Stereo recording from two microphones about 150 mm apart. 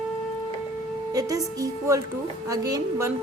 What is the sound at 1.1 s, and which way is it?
A woman's voice, 25° right (ahead or behind).